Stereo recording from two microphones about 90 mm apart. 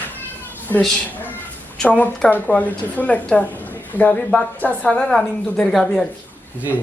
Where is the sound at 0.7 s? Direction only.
25° left (ahead or behind); by 6.0 s 5° left (ahead or behind).